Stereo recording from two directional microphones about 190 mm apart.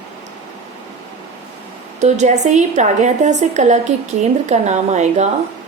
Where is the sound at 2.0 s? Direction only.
40° right (ahead or behind).